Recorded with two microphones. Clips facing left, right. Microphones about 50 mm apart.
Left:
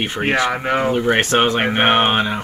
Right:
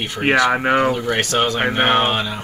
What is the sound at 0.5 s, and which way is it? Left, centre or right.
Speech, centre.